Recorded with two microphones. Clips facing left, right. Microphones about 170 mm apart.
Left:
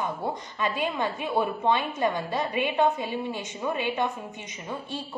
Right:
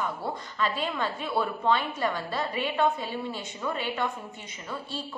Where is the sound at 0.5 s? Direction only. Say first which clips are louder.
Left 1 dB; 15° left (ahead or behind).